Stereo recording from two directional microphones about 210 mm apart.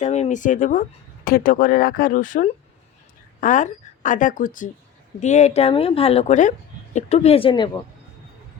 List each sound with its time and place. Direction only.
0.0 s a woman's voice: 35° left (ahead or behind)